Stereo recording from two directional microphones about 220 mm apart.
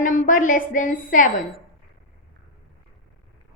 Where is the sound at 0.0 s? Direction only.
35° left (ahead or behind).